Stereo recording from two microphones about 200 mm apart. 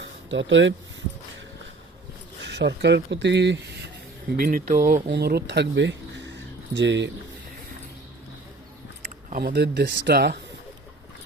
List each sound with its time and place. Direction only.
0.0 s a sound: 65° right (ahead or behind)
2.5 s speech: 60° right (ahead or behind)
4.4 s speech: 40° right (ahead or behind)
5.0 s speech: 55° right (ahead or behind)
9.0 s speech: 45° right (ahead or behind)